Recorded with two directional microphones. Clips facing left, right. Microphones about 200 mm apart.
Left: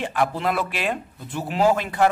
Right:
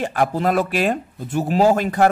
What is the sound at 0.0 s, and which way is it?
Speech, 45° right (ahead or behind).